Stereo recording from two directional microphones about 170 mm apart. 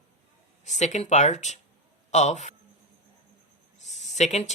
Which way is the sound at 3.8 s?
40° left (ahead or behind).